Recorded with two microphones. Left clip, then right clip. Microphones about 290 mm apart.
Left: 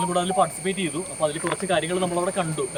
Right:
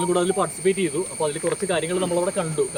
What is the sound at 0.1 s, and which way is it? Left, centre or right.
Speech, centre.